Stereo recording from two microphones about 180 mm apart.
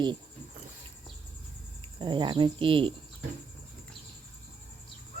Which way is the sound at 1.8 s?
25° right (ahead or behind).